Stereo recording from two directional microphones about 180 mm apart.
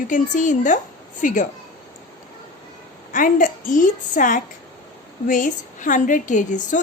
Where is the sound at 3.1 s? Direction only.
50° left (ahead or behind).